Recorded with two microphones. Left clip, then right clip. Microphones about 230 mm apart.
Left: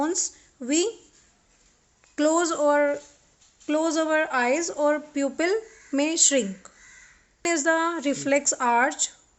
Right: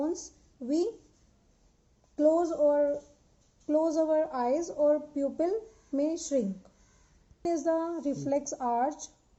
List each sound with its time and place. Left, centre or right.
0.0 s a sound: left
2.1 s speech: left
7.5 s a woman's voice: left